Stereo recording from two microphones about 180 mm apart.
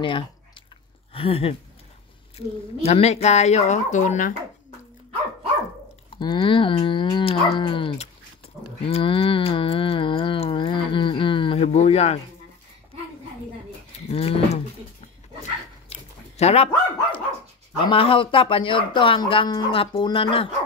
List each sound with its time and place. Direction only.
0.0 s chewing: 30° left (ahead or behind)
1.1 s speech: 30° left (ahead or behind)
6.0 s speech: 25° left (ahead or behind)
14.1 s speech: 35° left (ahead or behind)
15.9 s dog: 35° left (ahead or behind)
17.8 s speech: 30° left (ahead or behind)